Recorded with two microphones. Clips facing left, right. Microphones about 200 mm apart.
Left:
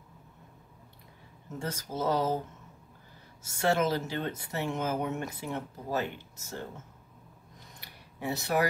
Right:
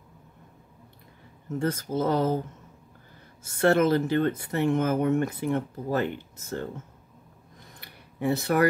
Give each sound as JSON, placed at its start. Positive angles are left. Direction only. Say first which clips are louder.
{"t": 1.6, "sound": "speech", "louder": "right 7 dB", "side_deg": -55}
{"t": 3.5, "sound": "speech", "louder": "right 6 dB", "side_deg": -55}
{"t": 7.8, "sound": "a sound", "louder": "right 8 dB", "side_deg": -55}